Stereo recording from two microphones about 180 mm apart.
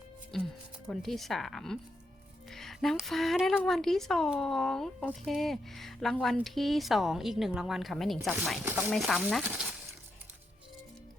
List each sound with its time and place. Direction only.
0.3 s speech: centre (ahead or behind)